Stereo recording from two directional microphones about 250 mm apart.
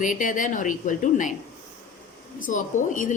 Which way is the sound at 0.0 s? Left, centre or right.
Left.